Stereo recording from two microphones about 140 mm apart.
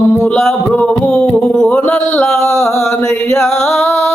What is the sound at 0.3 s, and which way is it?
Music, 5° left (ahead or behind).